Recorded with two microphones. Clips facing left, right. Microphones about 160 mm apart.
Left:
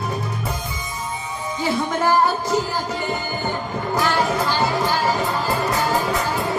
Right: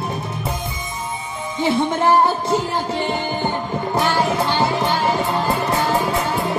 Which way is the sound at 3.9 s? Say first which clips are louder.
Right 1 dB; 25° right (ahead or behind).